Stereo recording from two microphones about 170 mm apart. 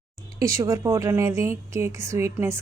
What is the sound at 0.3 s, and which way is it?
Speech, 20° right (ahead or behind).